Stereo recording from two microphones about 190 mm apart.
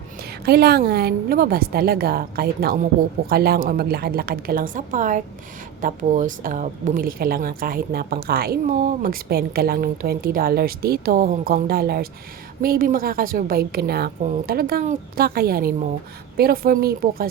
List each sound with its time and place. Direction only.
0.2 s a woman's voice: 55° right (ahead or behind)
14.2 s a woman's voice: 40° right (ahead or behind)